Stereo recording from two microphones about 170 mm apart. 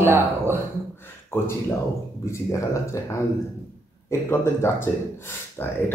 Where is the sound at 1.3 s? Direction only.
15° left (ahead or behind).